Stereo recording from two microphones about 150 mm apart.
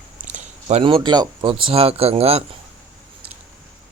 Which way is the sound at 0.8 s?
35° right (ahead or behind).